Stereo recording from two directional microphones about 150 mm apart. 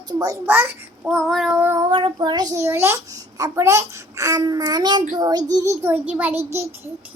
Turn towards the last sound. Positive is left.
turn(degrees=-15)  # may be behind; listen again after turning